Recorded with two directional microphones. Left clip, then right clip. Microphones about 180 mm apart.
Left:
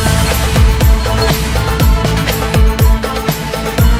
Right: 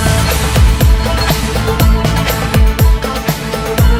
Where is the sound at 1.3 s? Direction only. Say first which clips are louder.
Right 1 dB; centre (ahead or behind).